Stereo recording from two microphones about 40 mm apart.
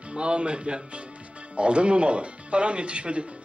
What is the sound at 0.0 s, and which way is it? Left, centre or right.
A man's voice, right.